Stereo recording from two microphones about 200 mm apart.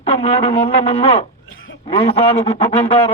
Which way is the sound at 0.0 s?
30° left (ahead or behind).